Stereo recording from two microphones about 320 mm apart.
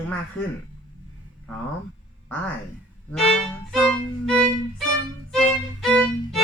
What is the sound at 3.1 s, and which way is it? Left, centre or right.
Violin, centre.